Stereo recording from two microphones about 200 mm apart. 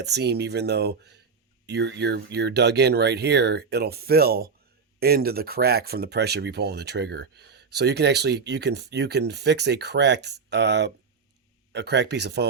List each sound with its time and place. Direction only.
0.0 s speech: 55° right (ahead or behind)